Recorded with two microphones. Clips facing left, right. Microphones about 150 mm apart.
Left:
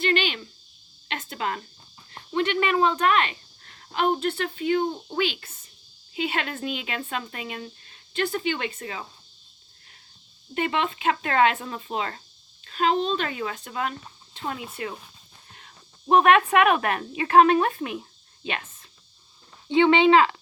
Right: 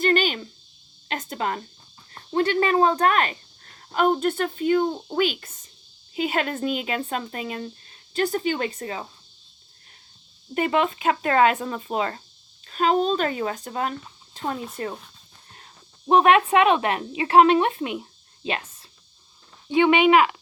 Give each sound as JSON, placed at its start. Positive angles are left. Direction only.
{"t": 0.0, "sound": "a sound", "side_deg": -45}
{"t": 1.0, "sound": "speech", "side_deg": -35}
{"t": 10.5, "sound": "speech", "side_deg": -35}
{"t": 19.7, "sound": "speech", "side_deg": -15}